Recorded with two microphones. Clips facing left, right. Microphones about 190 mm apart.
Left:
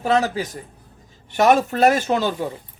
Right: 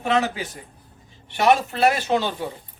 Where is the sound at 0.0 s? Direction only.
40° left (ahead or behind).